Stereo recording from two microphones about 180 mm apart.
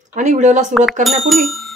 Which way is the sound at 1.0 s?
Centre (ahead or behind).